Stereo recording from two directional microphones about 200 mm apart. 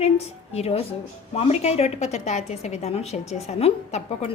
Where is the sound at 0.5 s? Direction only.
30° left (ahead or behind).